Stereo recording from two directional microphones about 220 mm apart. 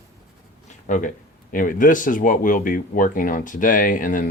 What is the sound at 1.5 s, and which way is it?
Speech, 40° left (ahead or behind).